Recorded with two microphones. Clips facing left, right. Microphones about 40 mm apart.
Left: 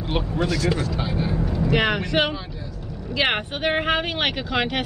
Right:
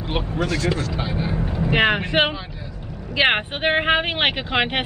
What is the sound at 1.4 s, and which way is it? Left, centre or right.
Speech, right.